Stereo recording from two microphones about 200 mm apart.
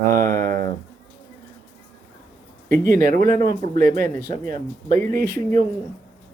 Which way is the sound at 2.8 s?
45° right (ahead or behind).